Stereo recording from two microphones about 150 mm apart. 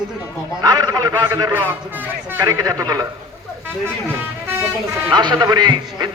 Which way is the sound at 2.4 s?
25° right (ahead or behind).